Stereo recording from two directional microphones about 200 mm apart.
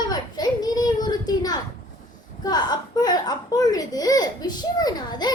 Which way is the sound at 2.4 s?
20° left (ahead or behind).